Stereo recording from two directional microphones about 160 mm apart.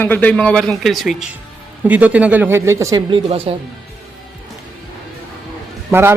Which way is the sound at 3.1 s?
35° right (ahead or behind).